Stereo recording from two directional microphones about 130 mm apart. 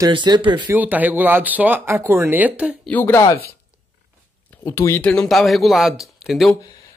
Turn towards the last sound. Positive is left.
turn(degrees=0)  # may be behind; listen again after turning